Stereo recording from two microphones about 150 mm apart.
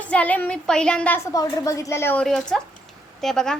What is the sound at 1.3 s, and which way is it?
Speech, 20° left (ahead or behind).